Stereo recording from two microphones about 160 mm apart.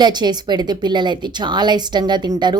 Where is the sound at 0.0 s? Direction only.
25° right (ahead or behind).